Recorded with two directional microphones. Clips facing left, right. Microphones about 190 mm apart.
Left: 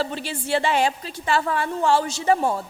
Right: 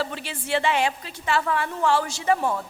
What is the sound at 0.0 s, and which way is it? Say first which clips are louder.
A man's voice: left 3 dB; 30° left (ahead or behind).